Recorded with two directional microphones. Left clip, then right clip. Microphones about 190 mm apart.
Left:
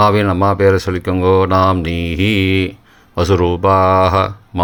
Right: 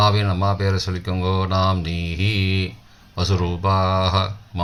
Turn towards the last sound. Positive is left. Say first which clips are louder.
# left 8 dB
turn(degrees=45)  # may be behind; listen again after turning